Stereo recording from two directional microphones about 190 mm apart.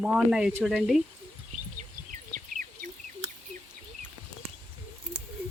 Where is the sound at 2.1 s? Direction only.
40° right (ahead or behind).